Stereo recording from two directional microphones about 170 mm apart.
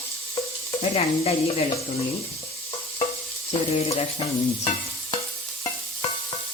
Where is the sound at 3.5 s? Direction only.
35° left (ahead or behind).